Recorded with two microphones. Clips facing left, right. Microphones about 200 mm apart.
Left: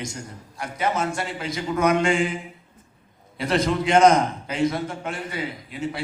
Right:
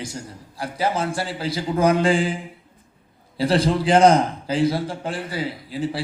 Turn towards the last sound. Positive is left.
turn(degrees=-30)  # may be behind; listen again after turning